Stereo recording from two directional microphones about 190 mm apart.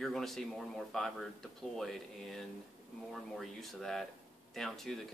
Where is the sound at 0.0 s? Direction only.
Centre (ahead or behind).